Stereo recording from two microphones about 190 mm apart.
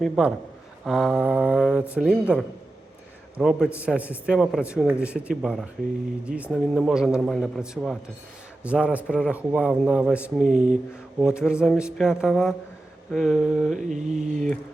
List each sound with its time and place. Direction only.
0.0 s a man's voice: centre (ahead or behind)
13.7 s mantra: 40° right (ahead or behind)